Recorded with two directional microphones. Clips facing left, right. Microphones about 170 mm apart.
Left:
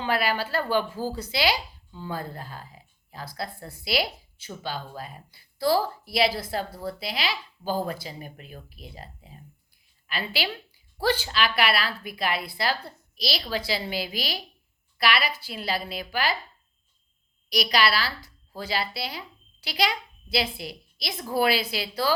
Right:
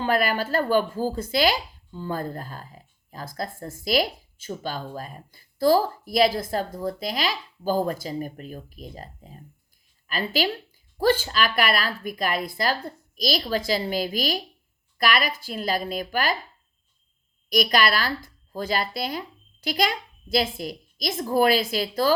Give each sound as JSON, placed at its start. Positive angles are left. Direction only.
{"t": 0.0, "sound": "speech", "side_deg": -45}
{"t": 17.5, "sound": "speech", "side_deg": -50}